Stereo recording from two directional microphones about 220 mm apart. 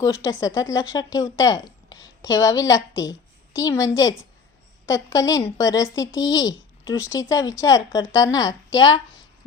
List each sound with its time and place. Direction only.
0.0 s a woman's voice: 15° left (ahead or behind)